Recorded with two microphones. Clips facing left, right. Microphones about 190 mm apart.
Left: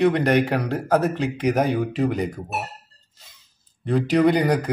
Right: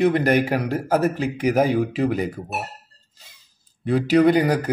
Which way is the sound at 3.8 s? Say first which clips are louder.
Right 2 dB; 5° right (ahead or behind).